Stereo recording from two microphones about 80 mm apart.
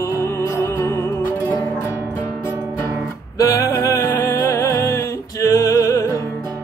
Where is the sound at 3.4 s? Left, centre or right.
Left.